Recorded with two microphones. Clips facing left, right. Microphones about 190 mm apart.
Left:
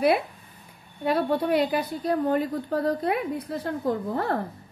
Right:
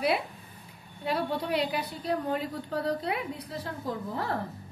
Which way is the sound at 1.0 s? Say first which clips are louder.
Left 6 dB; 50° left (ahead or behind).